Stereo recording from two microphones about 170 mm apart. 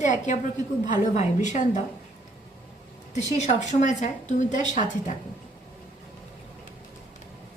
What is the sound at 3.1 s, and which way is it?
A woman's voice, 40° left (ahead or behind).